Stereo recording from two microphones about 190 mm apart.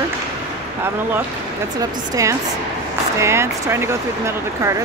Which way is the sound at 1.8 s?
15° right (ahead or behind).